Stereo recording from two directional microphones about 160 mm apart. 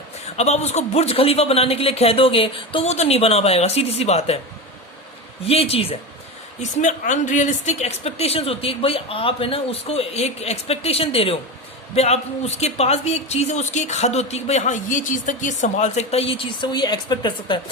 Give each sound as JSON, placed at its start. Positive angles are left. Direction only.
{"t": 0.3, "sound": "speech", "side_deg": 45}
{"t": 5.5, "sound": "speech", "side_deg": 35}
{"t": 6.6, "sound": "speech", "side_deg": 50}